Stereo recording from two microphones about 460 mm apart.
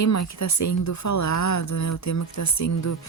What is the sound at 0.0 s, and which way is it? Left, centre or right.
Speech, left.